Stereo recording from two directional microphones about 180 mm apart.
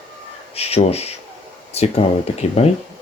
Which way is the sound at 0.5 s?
35° left (ahead or behind).